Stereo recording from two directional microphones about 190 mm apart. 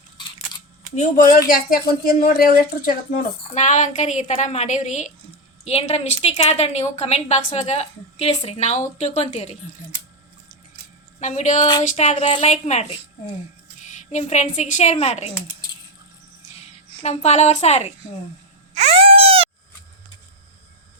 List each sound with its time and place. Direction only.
0.9 s a woman's voice: 40° left (ahead or behind)
11.2 s a woman's voice: 40° left (ahead or behind)
14.1 s a woman's voice: 35° left (ahead or behind)
17.0 s a woman's voice: 35° left (ahead or behind)
18.7 s baby cry: 35° right (ahead or behind)